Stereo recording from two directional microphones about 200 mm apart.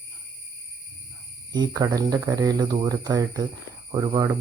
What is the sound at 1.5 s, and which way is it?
Speech, 20° right (ahead or behind).